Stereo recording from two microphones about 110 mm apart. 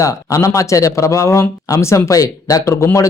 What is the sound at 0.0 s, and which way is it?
Speech, 30° left (ahead or behind).